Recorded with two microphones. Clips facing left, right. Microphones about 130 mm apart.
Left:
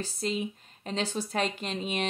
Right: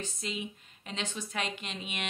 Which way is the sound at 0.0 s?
35° left (ahead or behind).